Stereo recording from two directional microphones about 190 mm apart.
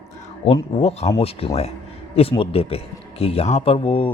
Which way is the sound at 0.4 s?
30° left (ahead or behind).